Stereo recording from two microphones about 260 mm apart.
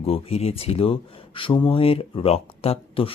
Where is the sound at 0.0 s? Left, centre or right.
Left.